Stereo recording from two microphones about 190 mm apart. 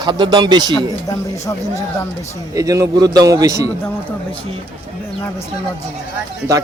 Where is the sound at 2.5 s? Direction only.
20° right (ahead or behind).